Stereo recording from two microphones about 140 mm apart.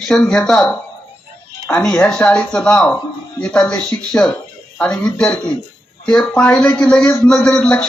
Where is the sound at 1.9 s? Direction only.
5° left (ahead or behind).